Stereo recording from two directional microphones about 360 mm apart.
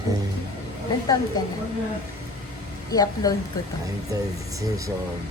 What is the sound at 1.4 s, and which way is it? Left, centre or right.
Speech, centre.